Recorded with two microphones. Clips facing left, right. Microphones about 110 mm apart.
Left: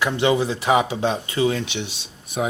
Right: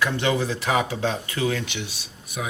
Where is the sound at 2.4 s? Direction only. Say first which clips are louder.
Left 7 dB; 40° left (ahead or behind).